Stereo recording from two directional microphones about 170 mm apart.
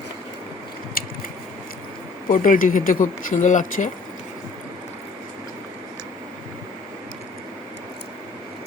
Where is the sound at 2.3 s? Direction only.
50° left (ahead or behind).